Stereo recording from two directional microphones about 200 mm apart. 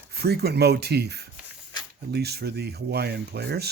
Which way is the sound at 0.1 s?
55° right (ahead or behind).